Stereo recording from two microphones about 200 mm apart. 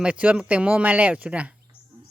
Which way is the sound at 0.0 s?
5° right (ahead or behind).